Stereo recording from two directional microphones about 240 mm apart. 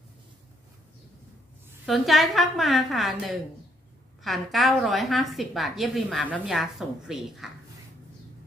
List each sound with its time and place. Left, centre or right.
1.9 s a woman's voice: centre